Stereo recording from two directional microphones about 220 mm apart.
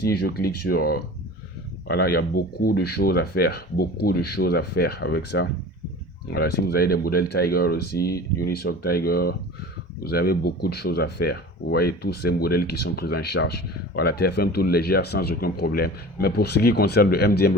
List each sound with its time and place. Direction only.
0.0 s speech: 45° left (ahead or behind)